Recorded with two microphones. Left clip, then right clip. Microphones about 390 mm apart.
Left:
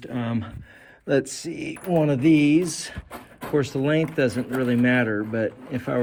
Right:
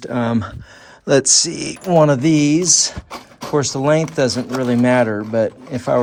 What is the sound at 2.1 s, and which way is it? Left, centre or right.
Speech, centre.